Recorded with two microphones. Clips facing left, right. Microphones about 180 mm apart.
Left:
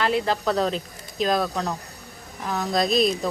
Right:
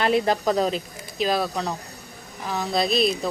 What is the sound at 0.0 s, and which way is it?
Speech, 15° right (ahead or behind).